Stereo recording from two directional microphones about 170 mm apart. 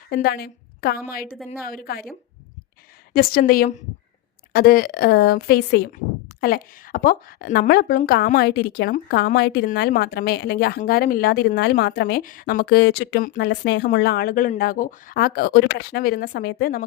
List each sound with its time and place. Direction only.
0.1 s a woman's voice: 65° left (ahead or behind)
3.1 s a woman's voice: 60° left (ahead or behind)
6.4 s a woman's voice: 60° left (ahead or behind); by 13.2 s 75° left (ahead or behind)
13.2 s a woman's voice: 65° left (ahead or behind); by 13.8 s 80° left
13.8 s a woman's voice: 70° left (ahead or behind)